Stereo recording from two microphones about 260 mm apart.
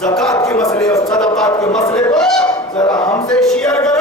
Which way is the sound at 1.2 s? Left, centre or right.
Centre.